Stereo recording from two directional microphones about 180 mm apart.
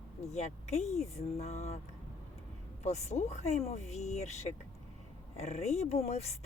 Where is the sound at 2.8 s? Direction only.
40° left (ahead or behind).